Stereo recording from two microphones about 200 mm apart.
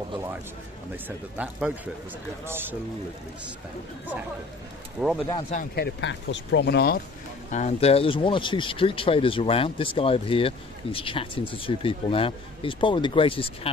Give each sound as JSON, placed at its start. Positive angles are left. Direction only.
{"t": 1.0, "sound": "a man's voice", "side_deg": -5}
{"t": 5.0, "sound": "speech", "side_deg": 0}
{"t": 5.5, "sound": "speech", "side_deg": 45}
{"t": 7.5, "sound": "speech", "side_deg": 35}